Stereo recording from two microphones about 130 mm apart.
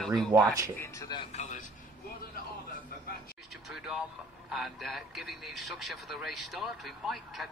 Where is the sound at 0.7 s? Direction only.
20° left (ahead or behind).